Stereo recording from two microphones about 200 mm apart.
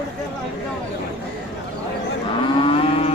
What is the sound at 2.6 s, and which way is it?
Livestock, 25° left (ahead or behind).